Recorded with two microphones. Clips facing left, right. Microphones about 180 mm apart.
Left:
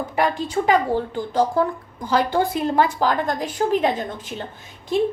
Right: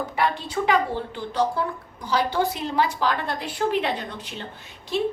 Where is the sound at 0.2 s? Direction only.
45° left (ahead or behind).